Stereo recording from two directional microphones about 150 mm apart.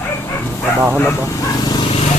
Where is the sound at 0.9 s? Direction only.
15° left (ahead or behind).